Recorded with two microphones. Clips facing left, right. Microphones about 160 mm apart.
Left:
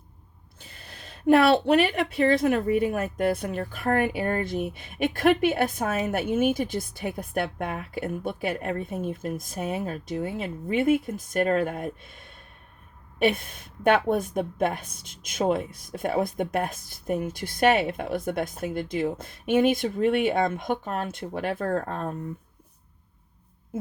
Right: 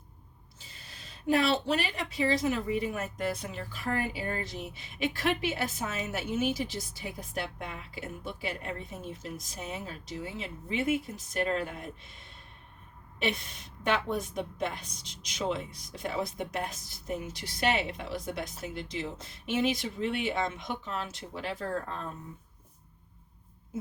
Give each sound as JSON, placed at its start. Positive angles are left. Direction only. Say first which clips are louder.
{"t": 0.6, "sound": "a woman's voice", "louder": "left 6 dB", "side_deg": 55}
{"t": 23.7, "sound": "speech", "louder": "left 5 dB", "side_deg": 55}